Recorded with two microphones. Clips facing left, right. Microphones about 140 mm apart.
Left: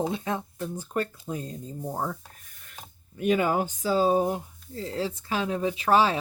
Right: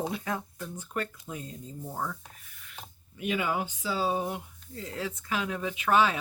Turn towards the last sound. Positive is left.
turn(degrees=35)  # may be behind; listen again after turning